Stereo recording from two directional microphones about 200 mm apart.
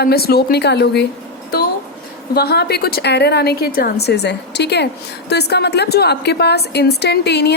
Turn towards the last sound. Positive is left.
turn(degrees=55)  # may be behind; listen again after turning